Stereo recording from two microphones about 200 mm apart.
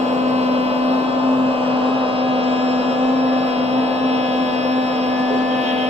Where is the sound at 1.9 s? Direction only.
30° right (ahead or behind).